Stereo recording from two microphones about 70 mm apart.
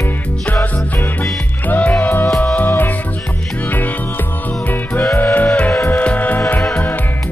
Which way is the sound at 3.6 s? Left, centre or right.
Left.